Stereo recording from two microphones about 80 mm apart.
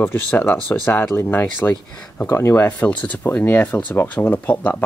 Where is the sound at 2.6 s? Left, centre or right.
Centre.